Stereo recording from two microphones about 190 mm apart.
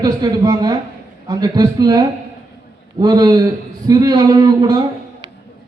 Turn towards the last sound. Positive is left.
turn(degrees=-20)  # may be behind; listen again after turning